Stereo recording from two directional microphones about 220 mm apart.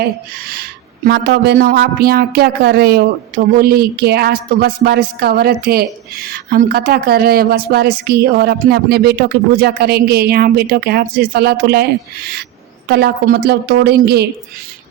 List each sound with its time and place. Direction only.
0.0 s speech: 40° right (ahead or behind)
12.9 s speech: 45° right (ahead or behind)